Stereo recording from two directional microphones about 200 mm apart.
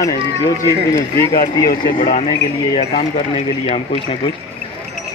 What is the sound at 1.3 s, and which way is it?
Speech, 25° left (ahead or behind).